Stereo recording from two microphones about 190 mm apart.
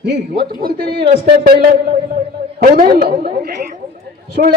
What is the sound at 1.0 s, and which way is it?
Speech, 40° right (ahead or behind).